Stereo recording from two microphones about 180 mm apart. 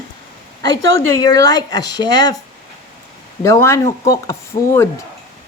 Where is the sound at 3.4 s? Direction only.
15° left (ahead or behind).